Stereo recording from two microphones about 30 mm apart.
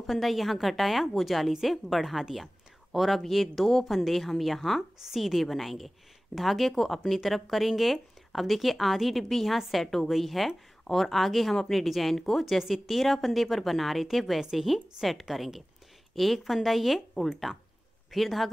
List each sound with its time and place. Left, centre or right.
0.0 s a woman's voice: centre
2.3 s a sound: centre
3.2 s a woman's voice: centre
12.5 s a woman's voice: centre
17.5 s speech: right
18.1 s a woman's voice: centre